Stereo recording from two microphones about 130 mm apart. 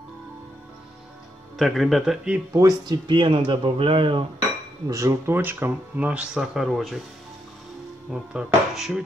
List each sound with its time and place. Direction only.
1.6 s speech: centre (ahead or behind)
2.5 s speech: 30° right (ahead or behind)
4.8 s speech: 25° right (ahead or behind); by 7.0 s centre (ahead or behind)
8.1 s speech: 5° right (ahead or behind)